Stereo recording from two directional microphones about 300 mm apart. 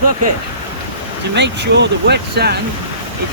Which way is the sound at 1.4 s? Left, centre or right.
Right.